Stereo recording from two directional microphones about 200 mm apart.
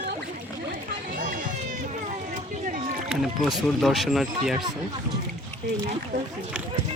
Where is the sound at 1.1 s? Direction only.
40° right (ahead or behind).